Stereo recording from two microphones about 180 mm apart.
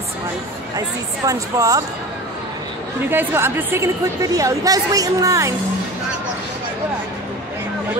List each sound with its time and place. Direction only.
0.7 s speech: 20° right (ahead or behind)
3.1 s a woman's voice: 10° right (ahead or behind)